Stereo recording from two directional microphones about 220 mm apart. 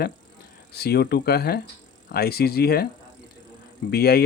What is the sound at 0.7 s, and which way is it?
Speech, 45° left (ahead or behind).